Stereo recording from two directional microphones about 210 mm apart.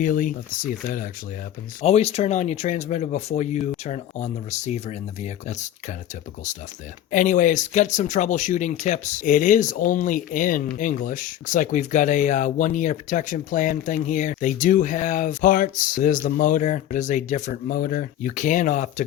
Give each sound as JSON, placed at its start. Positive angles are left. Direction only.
{"t": 0.0, "sound": "speech", "side_deg": 40}
{"t": 1.8, "sound": "speech", "side_deg": 30}
{"t": 7.1, "sound": "speech", "side_deg": 35}